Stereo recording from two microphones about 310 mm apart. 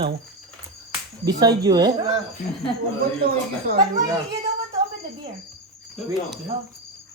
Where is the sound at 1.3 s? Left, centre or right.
Centre.